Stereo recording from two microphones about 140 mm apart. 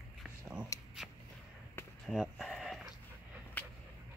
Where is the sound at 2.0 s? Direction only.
Centre (ahead or behind).